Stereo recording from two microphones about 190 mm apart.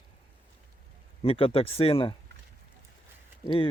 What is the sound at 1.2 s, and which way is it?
Speech, 30° left (ahead or behind).